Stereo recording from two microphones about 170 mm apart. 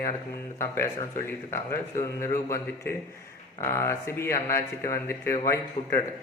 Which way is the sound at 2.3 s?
15° left (ahead or behind).